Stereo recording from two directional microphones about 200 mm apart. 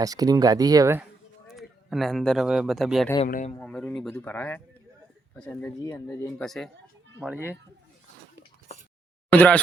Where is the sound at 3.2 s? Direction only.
40° left (ahead or behind).